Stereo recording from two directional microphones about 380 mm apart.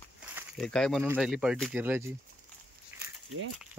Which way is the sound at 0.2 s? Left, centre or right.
Centre.